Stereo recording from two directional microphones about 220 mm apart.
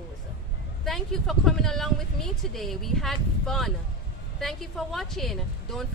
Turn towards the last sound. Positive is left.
turn(degrees=0)  # may be behind; listen again after turning